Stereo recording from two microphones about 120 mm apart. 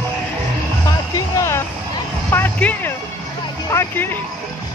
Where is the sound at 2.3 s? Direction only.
20° left (ahead or behind).